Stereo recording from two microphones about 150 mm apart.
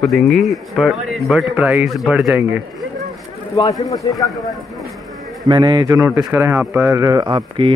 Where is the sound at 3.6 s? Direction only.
25° left (ahead or behind).